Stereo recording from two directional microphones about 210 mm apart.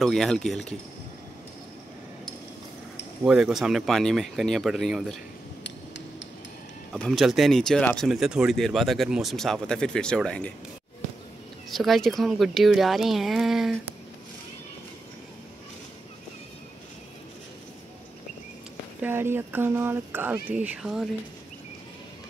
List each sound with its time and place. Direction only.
0.0 s speech: centre (ahead or behind)
3.3 s speech: 5° right (ahead or behind)
5.6 s a sound: 60° left (ahead or behind)
6.9 s speech: centre (ahead or behind)
11.7 s speech: centre (ahead or behind)
18.9 s speech: 10° right (ahead or behind)